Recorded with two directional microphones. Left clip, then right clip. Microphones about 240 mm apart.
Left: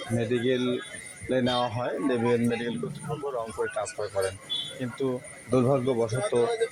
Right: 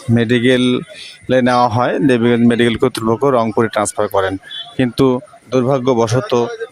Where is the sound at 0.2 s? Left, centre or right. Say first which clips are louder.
Right 13 dB; right.